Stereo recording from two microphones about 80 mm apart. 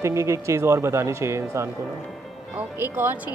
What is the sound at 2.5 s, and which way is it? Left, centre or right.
Speech, right.